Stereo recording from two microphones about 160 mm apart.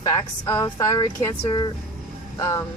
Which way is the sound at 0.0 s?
20° left (ahead or behind).